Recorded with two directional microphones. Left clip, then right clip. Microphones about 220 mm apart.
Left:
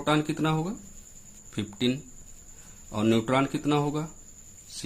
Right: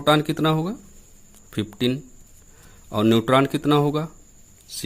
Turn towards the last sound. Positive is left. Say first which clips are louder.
# right 7 dB
turn(degrees=-40)  # may be behind; listen again after turning